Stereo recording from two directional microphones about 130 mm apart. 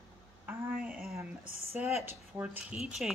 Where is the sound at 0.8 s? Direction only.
5° right (ahead or behind).